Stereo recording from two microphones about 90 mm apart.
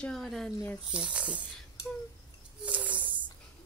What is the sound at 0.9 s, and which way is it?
Speech, 10° right (ahead or behind).